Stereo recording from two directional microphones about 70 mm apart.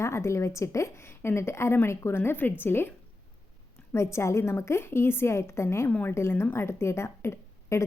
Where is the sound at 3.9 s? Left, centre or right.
Left.